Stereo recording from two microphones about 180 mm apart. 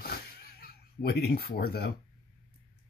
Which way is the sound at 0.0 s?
60° left (ahead or behind).